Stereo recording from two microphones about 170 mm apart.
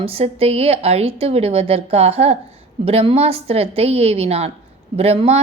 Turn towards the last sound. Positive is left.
turn(degrees=-35)  # may be behind; listen again after turning